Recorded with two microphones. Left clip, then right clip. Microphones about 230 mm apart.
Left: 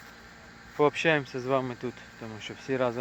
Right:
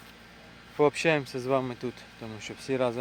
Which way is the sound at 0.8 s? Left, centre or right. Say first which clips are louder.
Even; centre.